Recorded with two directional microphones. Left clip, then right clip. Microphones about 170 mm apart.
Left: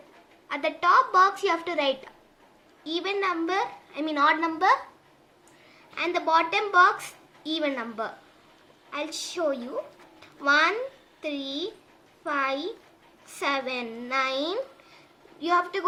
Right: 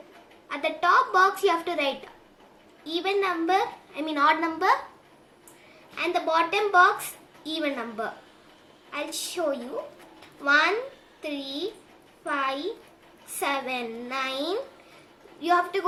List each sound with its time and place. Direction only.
0.4 s a child's voice: 25° left (ahead or behind)
5.9 s a child's voice: 25° left (ahead or behind)